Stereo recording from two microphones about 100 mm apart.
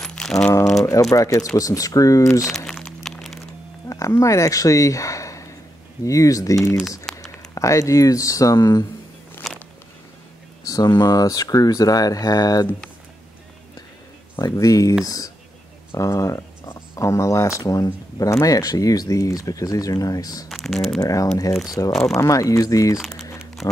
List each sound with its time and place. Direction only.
0.0 s a sound: 5° left (ahead or behind)
1.1 s speech: 35° left (ahead or behind)
2.5 s crack: 5° left (ahead or behind)
3.9 s speech: 30° left (ahead or behind)
7.1 s a sound: centre (ahead or behind)
7.5 s speech: 30° left (ahead or behind)
9.4 s a sound: centre (ahead or behind)
10.6 s speech: 40° left (ahead or behind)
14.4 s speech: 35° left (ahead or behind)
20.4 s speech: centre (ahead or behind)
21.0 s speech: 35° left (ahead or behind)
22.9 s speech: centre (ahead or behind)